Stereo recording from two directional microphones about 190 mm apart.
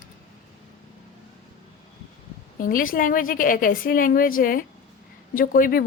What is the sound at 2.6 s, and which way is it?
A woman's voice, 45° left (ahead or behind).